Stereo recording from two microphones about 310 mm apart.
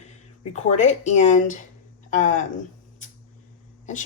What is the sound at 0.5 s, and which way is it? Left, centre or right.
Speech, left.